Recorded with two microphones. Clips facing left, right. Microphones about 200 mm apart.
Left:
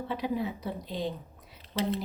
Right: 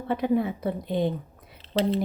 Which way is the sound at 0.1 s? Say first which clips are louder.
Right 9 dB; 55° right (ahead or behind).